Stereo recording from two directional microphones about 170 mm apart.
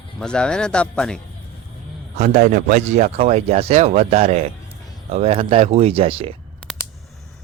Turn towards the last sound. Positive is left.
turn(degrees=5)  # may be behind; listen again after turning